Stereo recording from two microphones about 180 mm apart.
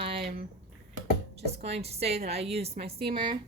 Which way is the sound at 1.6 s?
35° right (ahead or behind).